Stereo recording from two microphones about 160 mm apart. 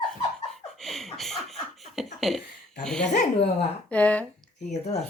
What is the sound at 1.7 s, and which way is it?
Beatboxing, centre (ahead or behind).